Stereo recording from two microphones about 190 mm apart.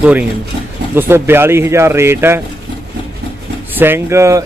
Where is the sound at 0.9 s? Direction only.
10° right (ahead or behind).